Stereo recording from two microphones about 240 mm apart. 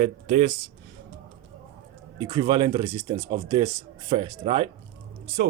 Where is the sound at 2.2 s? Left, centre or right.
Centre.